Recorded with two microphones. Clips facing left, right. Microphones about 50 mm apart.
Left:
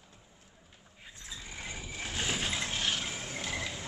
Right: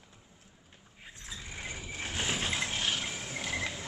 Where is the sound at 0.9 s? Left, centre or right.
Right.